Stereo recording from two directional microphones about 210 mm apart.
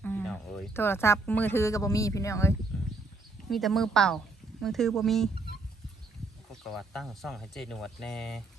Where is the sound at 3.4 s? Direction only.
Centre (ahead or behind).